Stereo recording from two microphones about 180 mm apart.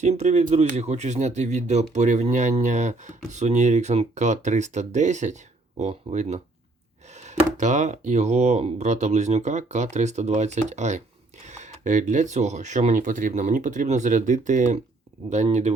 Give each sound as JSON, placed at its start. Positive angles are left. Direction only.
{"t": 0.0, "sound": "speech", "side_deg": -40}